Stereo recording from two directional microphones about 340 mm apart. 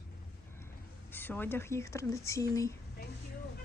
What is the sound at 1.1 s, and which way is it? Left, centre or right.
Speech, centre.